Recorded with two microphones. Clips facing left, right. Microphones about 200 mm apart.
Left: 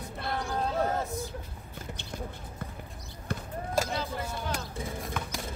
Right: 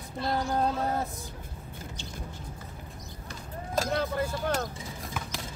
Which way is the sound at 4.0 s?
55° right (ahead or behind).